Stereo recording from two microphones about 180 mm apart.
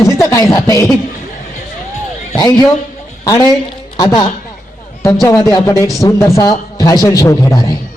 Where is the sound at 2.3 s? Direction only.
20° left (ahead or behind).